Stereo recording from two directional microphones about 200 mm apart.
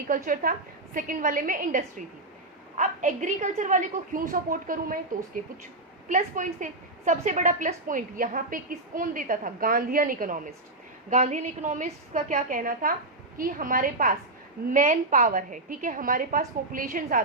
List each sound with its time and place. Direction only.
0.1 s a woman's voice: 45° right (ahead or behind)
6.1 s a woman's voice: 40° right (ahead or behind)